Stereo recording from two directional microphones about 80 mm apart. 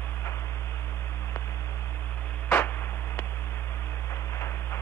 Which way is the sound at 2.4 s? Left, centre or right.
Left.